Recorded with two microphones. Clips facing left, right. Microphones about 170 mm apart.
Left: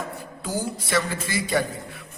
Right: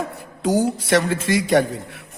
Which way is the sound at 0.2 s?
65° right (ahead or behind).